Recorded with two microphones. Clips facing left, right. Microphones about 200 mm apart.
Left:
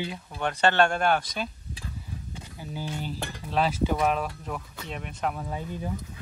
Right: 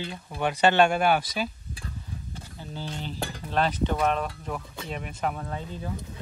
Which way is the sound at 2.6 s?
10° left (ahead or behind).